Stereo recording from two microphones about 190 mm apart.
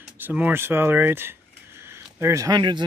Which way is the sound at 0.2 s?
10° right (ahead or behind).